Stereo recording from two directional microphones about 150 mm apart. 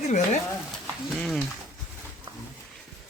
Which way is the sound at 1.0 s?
Centre (ahead or behind).